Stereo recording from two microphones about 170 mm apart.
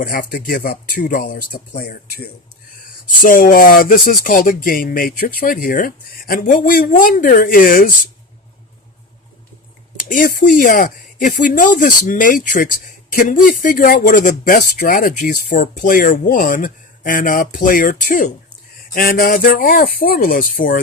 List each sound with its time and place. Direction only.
0.0 s speech: 55° left (ahead or behind)
10.0 s speech: 55° left (ahead or behind)